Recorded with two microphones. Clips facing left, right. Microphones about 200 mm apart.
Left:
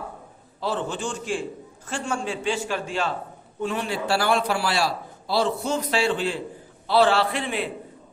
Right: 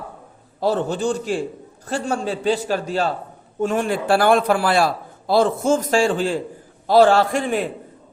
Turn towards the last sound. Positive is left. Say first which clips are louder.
# right 6 dB
turn(degrees=-45)  # may be behind; listen again after turning